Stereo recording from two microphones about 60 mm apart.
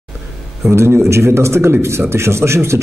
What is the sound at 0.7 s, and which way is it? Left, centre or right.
A man's voice, right.